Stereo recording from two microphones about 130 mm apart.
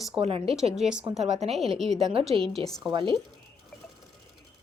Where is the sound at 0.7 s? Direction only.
5° right (ahead or behind).